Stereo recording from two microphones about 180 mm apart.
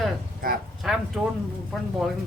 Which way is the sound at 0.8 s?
Centre (ahead or behind).